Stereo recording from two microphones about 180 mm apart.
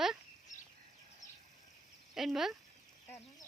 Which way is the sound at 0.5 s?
45° left (ahead or behind).